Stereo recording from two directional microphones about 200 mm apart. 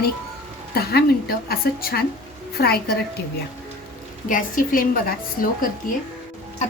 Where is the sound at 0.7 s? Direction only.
50° left (ahead or behind).